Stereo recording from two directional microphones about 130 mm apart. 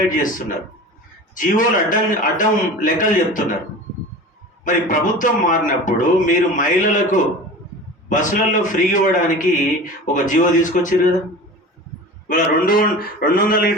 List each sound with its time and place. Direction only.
0.0 s a man's voice: 90° left
4.6 s a man's voice: 90° left
12.3 s a man's voice: 90° left